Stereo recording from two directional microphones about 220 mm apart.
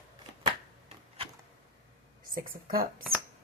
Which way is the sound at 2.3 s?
40° right (ahead or behind).